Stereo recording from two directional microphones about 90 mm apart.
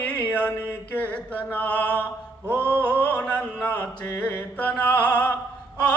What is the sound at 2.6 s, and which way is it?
Mantra, 15° left (ahead or behind).